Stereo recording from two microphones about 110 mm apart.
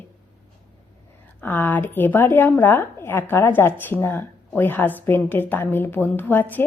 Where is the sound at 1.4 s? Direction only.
15° left (ahead or behind).